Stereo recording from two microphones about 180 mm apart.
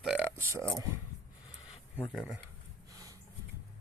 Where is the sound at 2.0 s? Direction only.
5° left (ahead or behind).